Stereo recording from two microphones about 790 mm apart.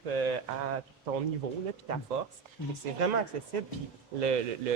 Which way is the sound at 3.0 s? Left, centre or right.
Right.